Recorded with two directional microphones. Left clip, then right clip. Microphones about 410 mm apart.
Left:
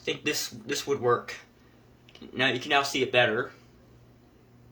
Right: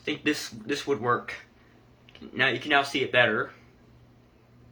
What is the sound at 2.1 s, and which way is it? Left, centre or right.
Speech, centre.